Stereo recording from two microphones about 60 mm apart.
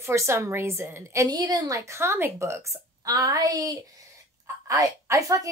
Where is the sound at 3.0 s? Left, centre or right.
Right.